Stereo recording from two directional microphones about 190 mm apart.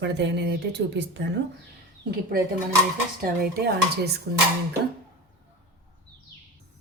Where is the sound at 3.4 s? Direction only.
55° right (ahead or behind).